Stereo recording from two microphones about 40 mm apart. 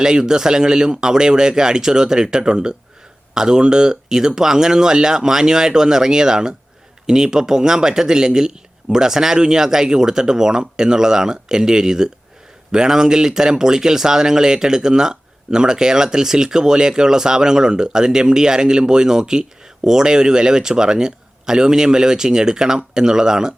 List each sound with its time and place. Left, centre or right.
0.0 s speech: centre